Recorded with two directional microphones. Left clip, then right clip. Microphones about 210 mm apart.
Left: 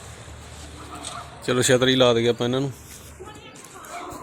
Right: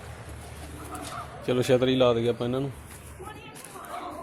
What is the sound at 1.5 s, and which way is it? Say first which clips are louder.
A man's voice: left 4 dB; 25° left (ahead or behind).